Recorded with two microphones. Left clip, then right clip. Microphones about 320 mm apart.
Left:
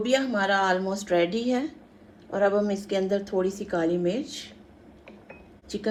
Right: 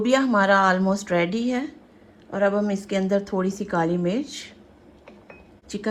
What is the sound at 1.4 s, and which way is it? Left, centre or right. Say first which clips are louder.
Speech: right 1 dB; right.